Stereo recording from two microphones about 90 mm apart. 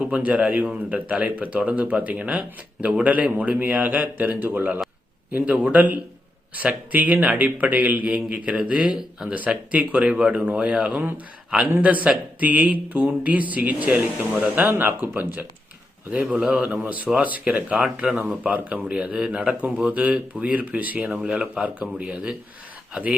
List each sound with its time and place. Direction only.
0.0 s speech: 15° right (ahead or behind)